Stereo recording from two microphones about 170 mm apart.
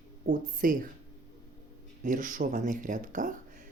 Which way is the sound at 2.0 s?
50° right (ahead or behind).